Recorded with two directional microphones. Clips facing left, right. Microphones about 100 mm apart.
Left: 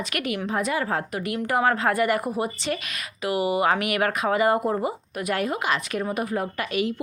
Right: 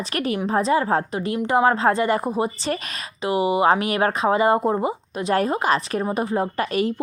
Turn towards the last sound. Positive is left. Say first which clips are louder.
# right 4 dB
turn(degrees=-35)  # may be behind; listen again after turning